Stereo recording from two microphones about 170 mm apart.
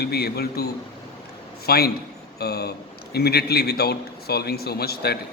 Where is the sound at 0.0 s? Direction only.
70° left (ahead or behind).